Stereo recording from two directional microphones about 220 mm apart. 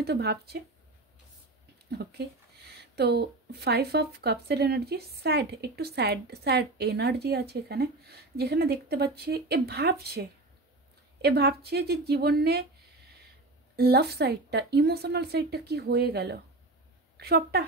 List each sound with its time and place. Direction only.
0.0 s a woman's voice: 50° right (ahead or behind)
1.9 s a woman's voice: 45° right (ahead or behind)
13.7 s a woman's voice: 45° right (ahead or behind)